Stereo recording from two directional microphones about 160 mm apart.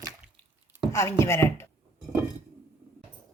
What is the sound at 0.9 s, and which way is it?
Speech, 15° left (ahead or behind).